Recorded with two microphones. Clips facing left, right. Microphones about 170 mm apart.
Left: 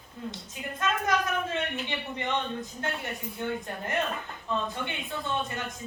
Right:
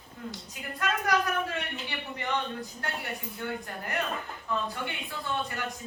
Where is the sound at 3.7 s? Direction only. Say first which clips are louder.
Left 2 dB; 20° left (ahead or behind).